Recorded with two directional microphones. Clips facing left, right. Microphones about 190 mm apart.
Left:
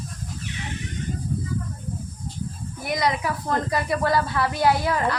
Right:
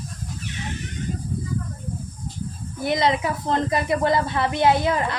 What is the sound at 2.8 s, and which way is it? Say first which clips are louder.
Speech: right 3 dB; 25° right (ahead or behind).